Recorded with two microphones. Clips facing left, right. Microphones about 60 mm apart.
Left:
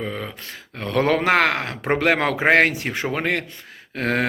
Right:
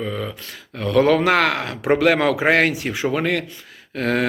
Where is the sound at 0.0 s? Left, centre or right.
Left.